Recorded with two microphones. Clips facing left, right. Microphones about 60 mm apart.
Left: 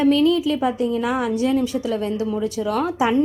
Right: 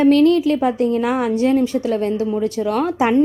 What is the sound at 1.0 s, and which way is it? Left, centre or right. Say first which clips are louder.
A woman's voice: right 3 dB; right.